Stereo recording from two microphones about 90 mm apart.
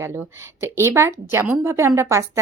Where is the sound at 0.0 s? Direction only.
30° right (ahead or behind).